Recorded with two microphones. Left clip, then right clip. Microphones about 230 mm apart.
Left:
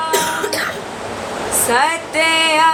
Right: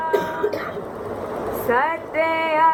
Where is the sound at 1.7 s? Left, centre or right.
Left.